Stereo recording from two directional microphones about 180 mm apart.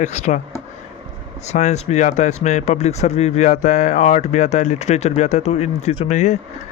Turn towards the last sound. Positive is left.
turn(degrees=40)  # may be behind; listen again after turning